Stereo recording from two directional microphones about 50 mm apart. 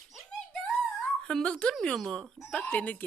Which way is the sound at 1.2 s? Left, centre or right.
Centre.